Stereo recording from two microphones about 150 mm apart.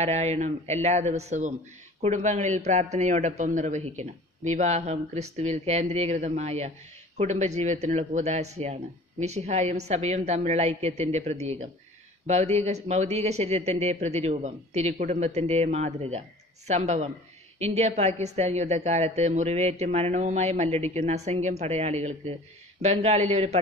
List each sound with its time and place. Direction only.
0.0 s a man's voice: 45° right (ahead or behind)